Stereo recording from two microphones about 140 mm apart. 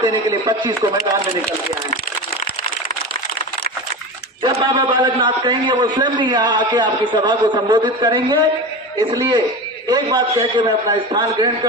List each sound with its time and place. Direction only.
0.0 s a man's voice: 25° right (ahead or behind)
4.4 s a man's voice: 35° right (ahead or behind)